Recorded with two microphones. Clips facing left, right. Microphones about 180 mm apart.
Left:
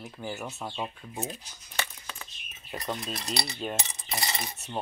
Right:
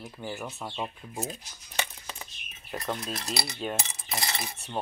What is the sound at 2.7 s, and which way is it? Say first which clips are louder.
Speech: right 1 dB; centre (ahead or behind).